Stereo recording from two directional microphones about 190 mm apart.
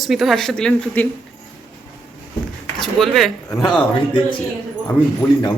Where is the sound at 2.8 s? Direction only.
Centre (ahead or behind).